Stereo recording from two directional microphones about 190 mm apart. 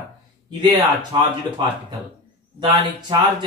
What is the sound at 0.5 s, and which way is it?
Speech, 25° right (ahead or behind).